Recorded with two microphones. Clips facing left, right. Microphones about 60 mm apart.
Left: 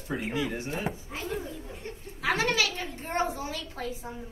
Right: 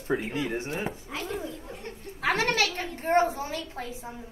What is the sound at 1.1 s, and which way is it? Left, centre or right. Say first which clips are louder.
Speech: right 1 dB; right.